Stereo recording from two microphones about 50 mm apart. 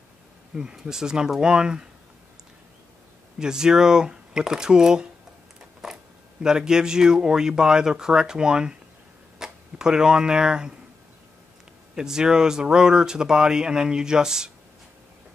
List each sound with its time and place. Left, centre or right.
0.6 s speech: centre
3.3 s speech: centre
5.8 s a sound: centre
6.4 s speech: centre
11.9 s speech: centre